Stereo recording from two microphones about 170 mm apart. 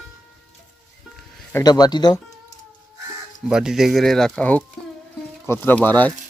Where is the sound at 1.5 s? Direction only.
20° left (ahead or behind).